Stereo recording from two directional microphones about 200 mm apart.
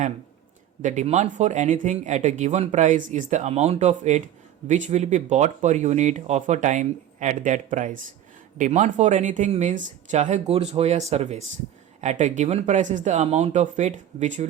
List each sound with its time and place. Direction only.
0.8 s speech: 40° right (ahead or behind)